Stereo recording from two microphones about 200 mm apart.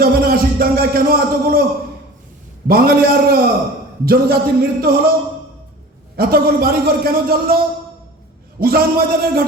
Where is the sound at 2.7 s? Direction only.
50° right (ahead or behind).